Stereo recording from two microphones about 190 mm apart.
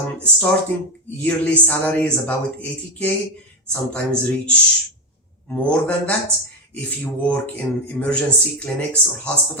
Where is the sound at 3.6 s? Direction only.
5° left (ahead or behind).